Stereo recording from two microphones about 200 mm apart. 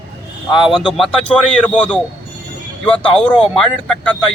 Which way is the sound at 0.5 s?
Centre (ahead or behind).